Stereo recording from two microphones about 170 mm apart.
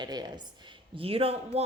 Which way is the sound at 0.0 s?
25° right (ahead or behind).